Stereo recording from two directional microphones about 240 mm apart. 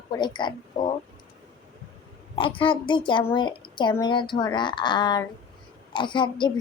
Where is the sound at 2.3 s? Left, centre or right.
Left.